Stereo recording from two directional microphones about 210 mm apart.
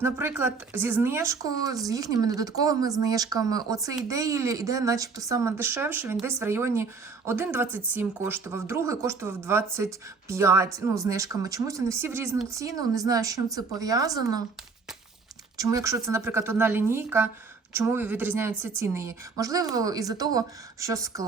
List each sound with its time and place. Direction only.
0.0 s speech: 10° right (ahead or behind)
15.5 s speech: 15° right (ahead or behind)